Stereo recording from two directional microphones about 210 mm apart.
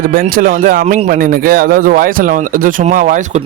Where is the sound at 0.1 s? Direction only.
40° right (ahead or behind).